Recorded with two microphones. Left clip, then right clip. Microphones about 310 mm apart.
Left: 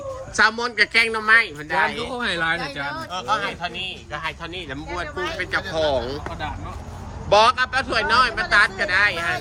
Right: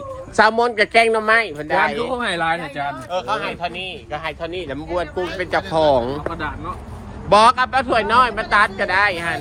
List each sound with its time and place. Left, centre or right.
0.3 s a man's voice: centre
2.1 s speech: right
3.1 s a man's voice: centre
7.3 s a man's voice: centre